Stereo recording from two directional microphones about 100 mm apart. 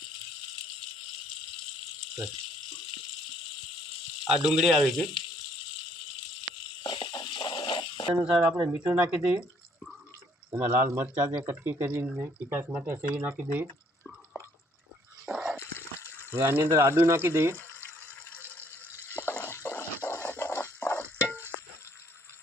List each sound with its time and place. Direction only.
4.3 s speech: 5° right (ahead or behind)
6.8 s a sound: 55° left (ahead or behind)
8.1 s speech: 10° right (ahead or behind)
10.5 s speech: 20° right (ahead or behind)
15.3 s dog: 10° right (ahead or behind)
16.0 s water: 25° left (ahead or behind)
16.3 s speech: 25° right (ahead or behind)
17.6 s water: 25° left (ahead or behind)